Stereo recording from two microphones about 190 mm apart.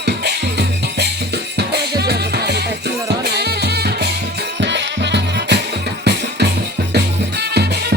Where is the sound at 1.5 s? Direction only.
60° right (ahead or behind).